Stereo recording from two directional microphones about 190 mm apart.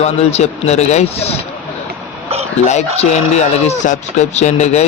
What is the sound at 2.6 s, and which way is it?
A man's voice, 35° left (ahead or behind).